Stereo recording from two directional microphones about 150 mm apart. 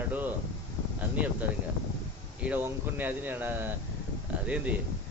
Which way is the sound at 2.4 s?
10° right (ahead or behind).